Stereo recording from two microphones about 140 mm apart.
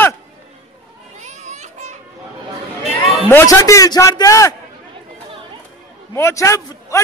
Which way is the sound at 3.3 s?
20° left (ahead or behind).